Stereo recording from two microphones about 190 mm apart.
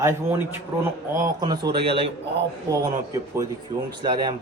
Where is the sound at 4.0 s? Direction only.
25° right (ahead or behind).